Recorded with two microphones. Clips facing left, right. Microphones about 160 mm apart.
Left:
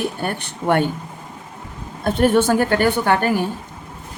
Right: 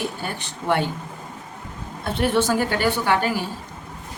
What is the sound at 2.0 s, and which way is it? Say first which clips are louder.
A woman's voice: left 5 dB; 45° left (ahead or behind).